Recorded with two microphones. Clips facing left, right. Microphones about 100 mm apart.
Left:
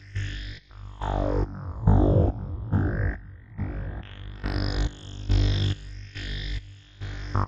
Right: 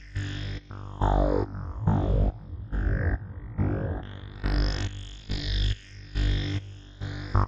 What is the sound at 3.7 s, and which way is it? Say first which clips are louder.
Music: right 7 dB; 35° right (ahead or behind).